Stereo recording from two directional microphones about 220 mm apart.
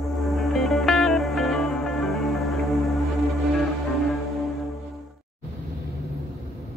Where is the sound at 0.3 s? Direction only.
Centre (ahead or behind).